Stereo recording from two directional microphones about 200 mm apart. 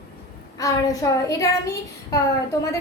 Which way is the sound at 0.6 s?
15° left (ahead or behind).